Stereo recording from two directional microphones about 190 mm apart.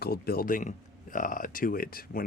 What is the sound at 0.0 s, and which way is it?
Speech, 55° left (ahead or behind).